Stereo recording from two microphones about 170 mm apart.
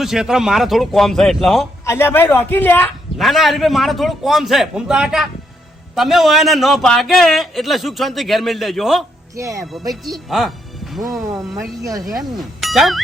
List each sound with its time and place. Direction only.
0.0 s a man's voice: centre (ahead or behind)
1.8 s a man's voice: 15° left (ahead or behind)
3.2 s a man's voice: centre (ahead or behind)
9.4 s speech: 20° right (ahead or behind)
10.2 s a man's voice: centre (ahead or behind)
11.0 s speech: 20° right (ahead or behind)
12.1 s a man's voice: centre (ahead or behind)